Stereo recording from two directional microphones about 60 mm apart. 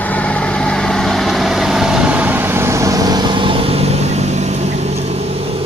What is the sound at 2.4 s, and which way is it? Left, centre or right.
Vehicle, right.